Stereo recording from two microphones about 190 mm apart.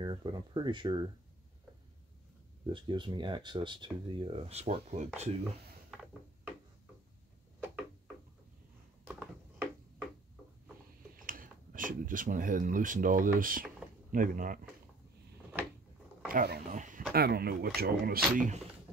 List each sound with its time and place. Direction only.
0.0 s speech: 25° right (ahead or behind)
2.6 s speech: 25° right (ahead or behind)
9.0 s a sound: 10° right (ahead or behind)
11.2 s speech: 45° right (ahead or behind)
16.3 s speech: 50° right (ahead or behind)
16.7 s a sound: 40° right (ahead or behind)
17.1 s speech: 55° right (ahead or behind)